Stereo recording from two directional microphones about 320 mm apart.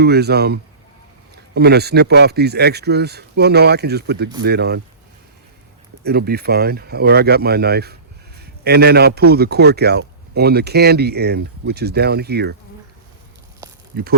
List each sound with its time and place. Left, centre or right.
0.0 s a man's voice: right
6.0 s a man's voice: right
13.9 s speech: right